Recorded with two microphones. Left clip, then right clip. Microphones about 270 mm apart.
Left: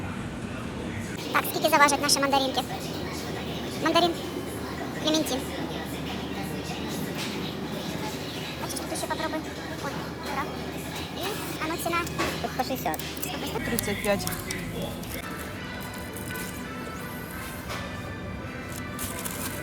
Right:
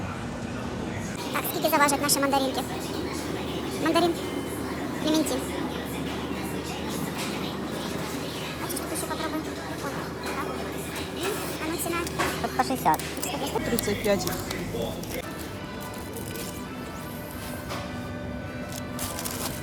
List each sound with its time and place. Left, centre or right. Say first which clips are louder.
1.3 s speech: left 2 dB; centre
3.8 s speech: left 1 dB; centre
12.5 s music: right 9 dB; centre
14.1 s speech: right 1 dB; centre